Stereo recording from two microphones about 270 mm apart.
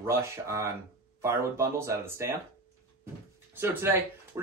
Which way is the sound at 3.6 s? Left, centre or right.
Centre.